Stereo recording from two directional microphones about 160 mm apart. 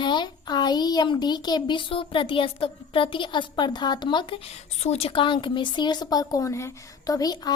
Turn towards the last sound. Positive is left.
turn(degrees=25)  # may be behind; listen again after turning